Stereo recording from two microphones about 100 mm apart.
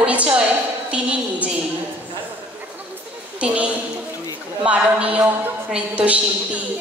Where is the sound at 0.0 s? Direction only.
10° right (ahead or behind).